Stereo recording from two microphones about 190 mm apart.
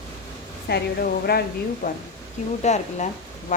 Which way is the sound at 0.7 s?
60° left (ahead or behind).